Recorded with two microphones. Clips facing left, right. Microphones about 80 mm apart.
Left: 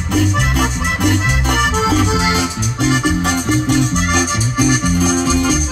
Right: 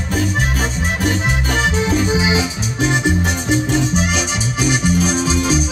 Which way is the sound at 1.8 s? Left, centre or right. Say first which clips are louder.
Left 2 dB; left.